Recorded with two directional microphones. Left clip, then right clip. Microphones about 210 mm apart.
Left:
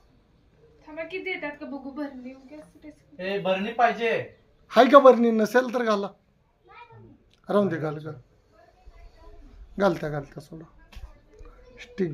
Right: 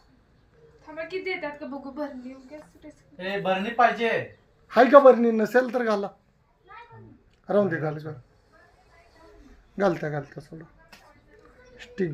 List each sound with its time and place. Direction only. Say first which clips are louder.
1.0 s a woman's voice: right 1 dB; 5° right (ahead or behind)
3.2 s speech: even; 20° right (ahead or behind)
4.7 s speech: even; 10° left (ahead or behind)
7.4 s speech: right 1 dB; 5° left (ahead or behind)
9.7 s speech: left 1 dB; 5° left (ahead or behind)
11.8 s speech: even; 5° left (ahead or behind)